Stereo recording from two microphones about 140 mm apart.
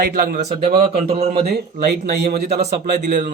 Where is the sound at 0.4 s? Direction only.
50° right (ahead or behind).